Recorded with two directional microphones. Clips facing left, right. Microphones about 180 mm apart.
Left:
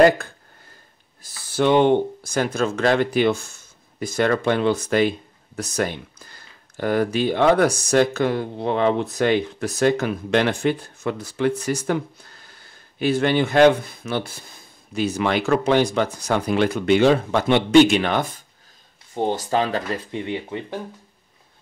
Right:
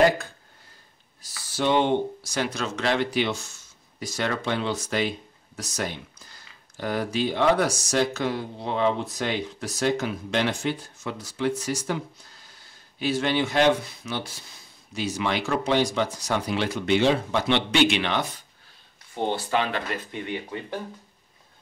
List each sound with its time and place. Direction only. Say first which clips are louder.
1.2 s speech: left 6 dB; 55° left (ahead or behind); by 20.6 s 20° left (ahead or behind)